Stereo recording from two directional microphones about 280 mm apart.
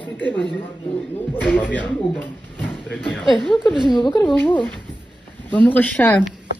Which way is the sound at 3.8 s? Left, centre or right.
Centre.